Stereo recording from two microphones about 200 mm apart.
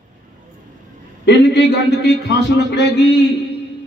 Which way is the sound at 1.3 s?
60° left (ahead or behind).